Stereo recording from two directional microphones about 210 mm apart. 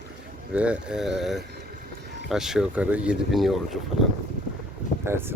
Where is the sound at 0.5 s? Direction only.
5° right (ahead or behind).